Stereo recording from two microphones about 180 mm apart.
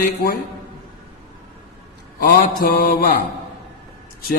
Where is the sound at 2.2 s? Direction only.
50° left (ahead or behind).